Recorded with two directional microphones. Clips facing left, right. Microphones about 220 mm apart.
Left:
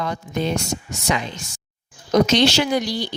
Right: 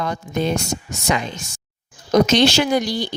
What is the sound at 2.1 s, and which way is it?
Speech, 45° right (ahead or behind).